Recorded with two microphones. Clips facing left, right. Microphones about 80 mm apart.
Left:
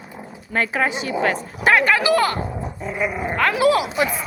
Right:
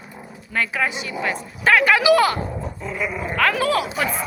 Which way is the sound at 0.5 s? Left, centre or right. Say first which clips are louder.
Left 2 dB; left.